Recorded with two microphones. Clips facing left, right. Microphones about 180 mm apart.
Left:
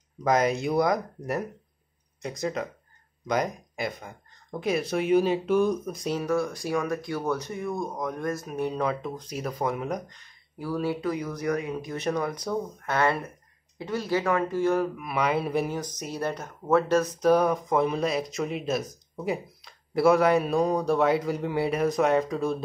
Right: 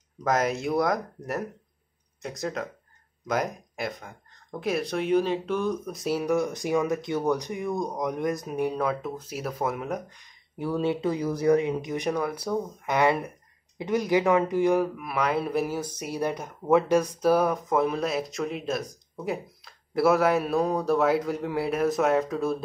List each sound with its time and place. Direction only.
0.2 s speech: centre (ahead or behind)
5.9 s speech: 5° right (ahead or behind)
10.6 s speech: 25° right (ahead or behind)
15.0 s speech: centre (ahead or behind)